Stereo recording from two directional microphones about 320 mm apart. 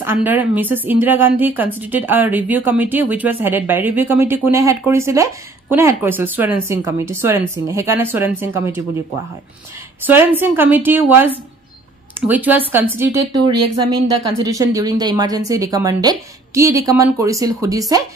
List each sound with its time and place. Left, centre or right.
0.0 s a woman's voice: centre
10.0 s a woman's voice: centre
14.4 s a woman's voice: centre